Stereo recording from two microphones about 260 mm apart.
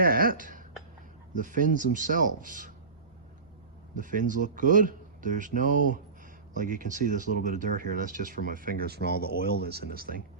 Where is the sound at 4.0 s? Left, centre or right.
Right.